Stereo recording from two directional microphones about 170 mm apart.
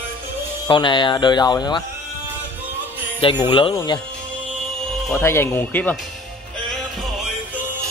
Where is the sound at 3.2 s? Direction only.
25° left (ahead or behind).